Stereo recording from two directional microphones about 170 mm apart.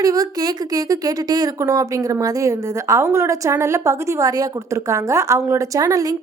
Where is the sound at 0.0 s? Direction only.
20° right (ahead or behind).